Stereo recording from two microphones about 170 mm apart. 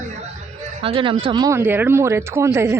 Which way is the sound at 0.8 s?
30° right (ahead or behind).